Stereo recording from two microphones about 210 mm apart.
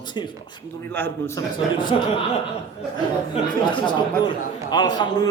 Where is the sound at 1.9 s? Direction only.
25° left (ahead or behind).